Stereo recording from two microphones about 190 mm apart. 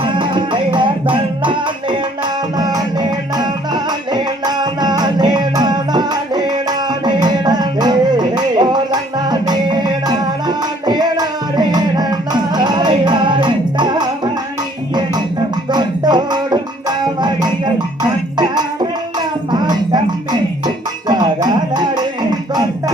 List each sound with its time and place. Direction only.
0.0 s music: 25° right (ahead or behind)
15.7 s music: 20° right (ahead or behind)
19.5 s music: 20° right (ahead or behind)